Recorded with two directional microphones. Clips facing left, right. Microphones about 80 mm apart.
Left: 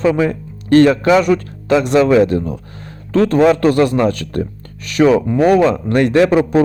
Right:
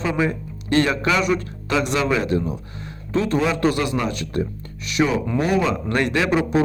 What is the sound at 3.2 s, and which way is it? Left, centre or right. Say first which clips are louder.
Speech: left 9 dB; left.